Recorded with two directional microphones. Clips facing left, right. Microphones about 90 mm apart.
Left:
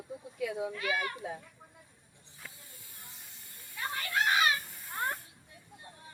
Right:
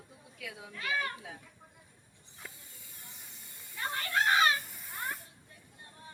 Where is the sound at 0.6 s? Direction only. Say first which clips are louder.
Right 1 dB; 15° left (ahead or behind).